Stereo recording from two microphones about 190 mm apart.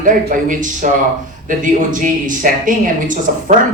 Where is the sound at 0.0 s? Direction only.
45° right (ahead or behind).